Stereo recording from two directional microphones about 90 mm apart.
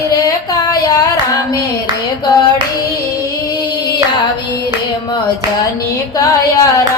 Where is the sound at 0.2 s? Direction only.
40° left (ahead or behind).